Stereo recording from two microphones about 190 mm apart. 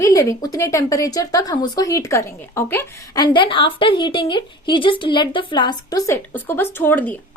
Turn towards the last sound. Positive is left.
turn(degrees=10)  # may be behind; listen again after turning